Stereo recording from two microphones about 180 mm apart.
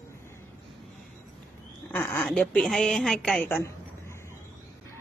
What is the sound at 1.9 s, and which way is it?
A woman's voice, 10° left (ahead or behind).